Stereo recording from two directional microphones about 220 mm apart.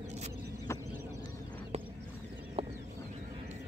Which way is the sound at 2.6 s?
25° right (ahead or behind).